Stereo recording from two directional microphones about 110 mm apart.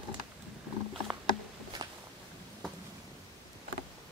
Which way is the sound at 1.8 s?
40° right (ahead or behind).